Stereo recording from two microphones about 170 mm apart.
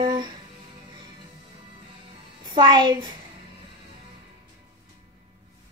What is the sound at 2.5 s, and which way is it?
Female singing, 25° right (ahead or behind).